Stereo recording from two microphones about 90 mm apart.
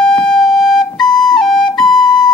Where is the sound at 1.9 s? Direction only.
5° left (ahead or behind).